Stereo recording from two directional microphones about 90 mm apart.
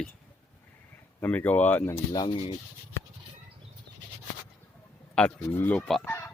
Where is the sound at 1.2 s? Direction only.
20° left (ahead or behind).